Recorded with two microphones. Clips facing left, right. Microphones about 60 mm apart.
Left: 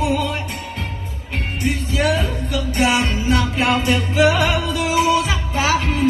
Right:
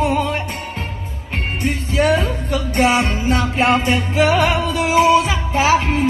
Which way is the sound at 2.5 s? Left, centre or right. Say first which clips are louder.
Right 2 dB; right.